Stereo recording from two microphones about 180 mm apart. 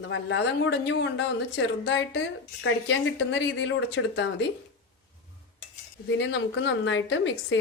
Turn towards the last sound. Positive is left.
turn(degrees=90)